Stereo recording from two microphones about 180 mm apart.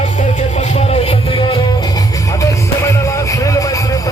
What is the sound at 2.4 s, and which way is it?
Music, 15° left (ahead or behind).